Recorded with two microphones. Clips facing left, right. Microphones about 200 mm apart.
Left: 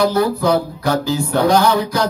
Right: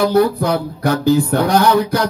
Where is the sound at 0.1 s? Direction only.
55° right (ahead or behind).